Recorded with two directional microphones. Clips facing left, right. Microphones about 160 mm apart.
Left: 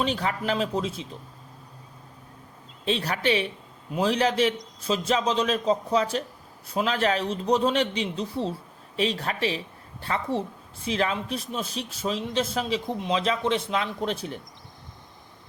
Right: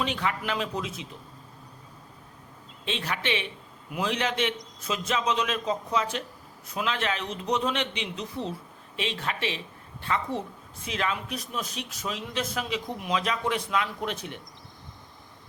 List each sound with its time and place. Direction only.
0.0 s a man's voice: 35° left (ahead or behind)
2.8 s a man's voice: 35° left (ahead or behind)